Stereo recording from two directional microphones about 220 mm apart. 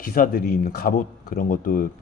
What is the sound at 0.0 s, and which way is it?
Speech, 40° left (ahead or behind).